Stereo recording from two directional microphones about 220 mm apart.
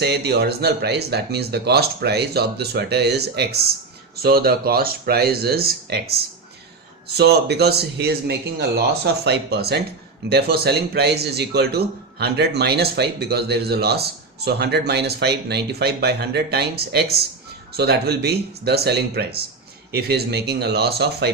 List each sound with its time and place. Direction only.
0.0 s speech: 50° right (ahead or behind)